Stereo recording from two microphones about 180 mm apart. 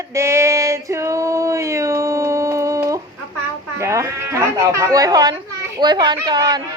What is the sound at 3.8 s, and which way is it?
Speech, 15° right (ahead or behind).